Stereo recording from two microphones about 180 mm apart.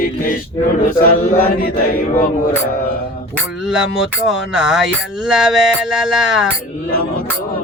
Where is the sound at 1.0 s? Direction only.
55° left (ahead or behind).